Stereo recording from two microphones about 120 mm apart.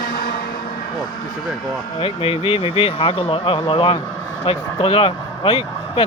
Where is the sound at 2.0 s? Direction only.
50° left (ahead or behind).